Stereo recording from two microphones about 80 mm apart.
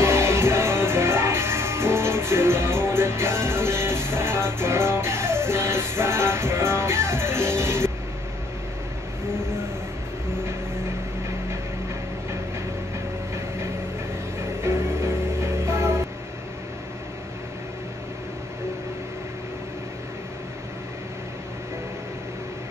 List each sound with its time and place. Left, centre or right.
0.0 s music: right
14.6 s music: right